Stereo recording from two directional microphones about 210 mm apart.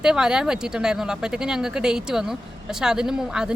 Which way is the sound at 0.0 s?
5° right (ahead or behind).